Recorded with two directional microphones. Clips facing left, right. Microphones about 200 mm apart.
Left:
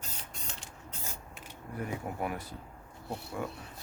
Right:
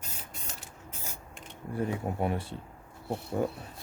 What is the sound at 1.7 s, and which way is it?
Speech, 25° right (ahead or behind).